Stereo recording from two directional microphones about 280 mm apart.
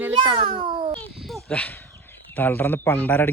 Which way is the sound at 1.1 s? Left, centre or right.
Centre.